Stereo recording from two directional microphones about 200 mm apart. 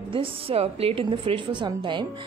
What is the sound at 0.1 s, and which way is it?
A woman's voice, 25° right (ahead or behind).